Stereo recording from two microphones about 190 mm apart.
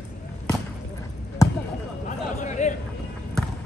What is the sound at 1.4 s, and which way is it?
Basketball bounce, 15° left (ahead or behind).